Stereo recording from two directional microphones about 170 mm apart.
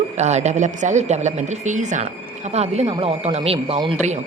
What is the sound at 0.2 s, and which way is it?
Speech, 40° right (ahead or behind).